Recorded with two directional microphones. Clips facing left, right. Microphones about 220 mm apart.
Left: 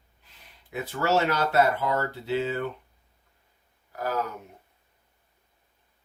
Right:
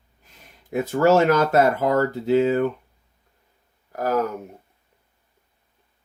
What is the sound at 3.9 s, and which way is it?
Speech, 45° right (ahead or behind).